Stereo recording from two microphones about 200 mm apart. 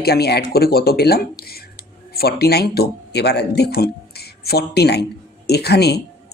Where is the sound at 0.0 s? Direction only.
55° left (ahead or behind).